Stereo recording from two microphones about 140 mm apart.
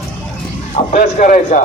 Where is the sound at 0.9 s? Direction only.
70° left (ahead or behind).